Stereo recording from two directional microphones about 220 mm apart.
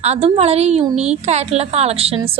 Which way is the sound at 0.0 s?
30° right (ahead or behind).